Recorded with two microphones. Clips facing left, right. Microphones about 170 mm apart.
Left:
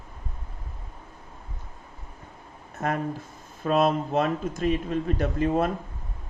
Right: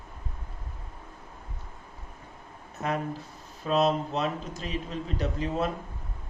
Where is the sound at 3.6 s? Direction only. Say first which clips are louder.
Left 2 dB; 50° left (ahead or behind).